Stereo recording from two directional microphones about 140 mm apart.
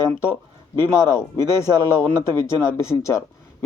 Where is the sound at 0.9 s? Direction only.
20° left (ahead or behind).